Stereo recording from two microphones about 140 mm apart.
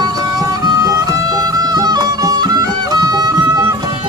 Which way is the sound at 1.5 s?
30° right (ahead or behind).